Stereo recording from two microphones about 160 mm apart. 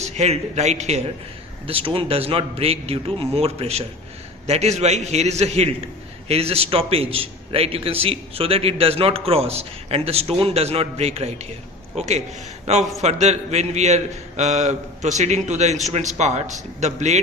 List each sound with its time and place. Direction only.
0.0 s a man's voice: 45° right (ahead or behind)